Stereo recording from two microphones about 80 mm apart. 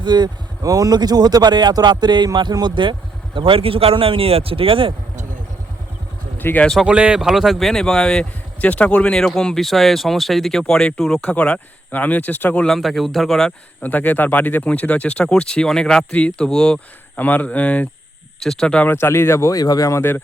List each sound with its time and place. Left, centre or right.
0.0 s speech: right
0.6 s speech: right
4.7 s speech: right
6.3 s speech: left
6.8 s speech: centre
7.2 s speech: centre; by 12.6 s left
12.6 s speech: centre
13.8 s speech: left
17.2 s speech: left
18.3 s speech: centre
18.9 s speech: left
20.0 s speech: left